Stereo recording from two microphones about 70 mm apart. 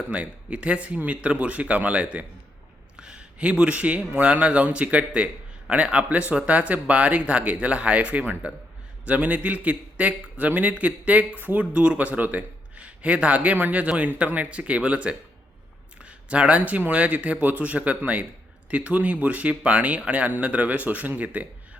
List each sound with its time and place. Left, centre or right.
0.1 s a man's voice: centre